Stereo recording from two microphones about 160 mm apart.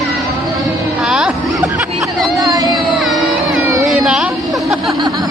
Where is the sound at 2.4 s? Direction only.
25° right (ahead or behind).